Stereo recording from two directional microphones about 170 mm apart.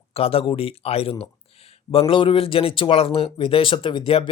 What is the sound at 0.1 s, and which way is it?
Speech, 35° left (ahead or behind).